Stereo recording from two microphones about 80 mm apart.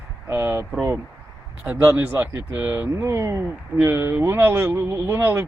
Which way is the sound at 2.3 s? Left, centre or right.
Right.